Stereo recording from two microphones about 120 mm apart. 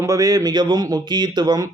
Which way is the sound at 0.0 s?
30° right (ahead or behind).